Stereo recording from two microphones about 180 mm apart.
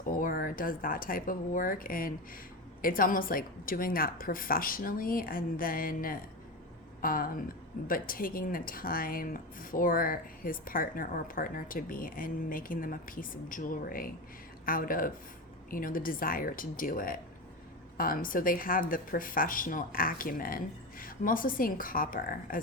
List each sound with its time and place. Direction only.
0.0 s speech: 50° left (ahead or behind)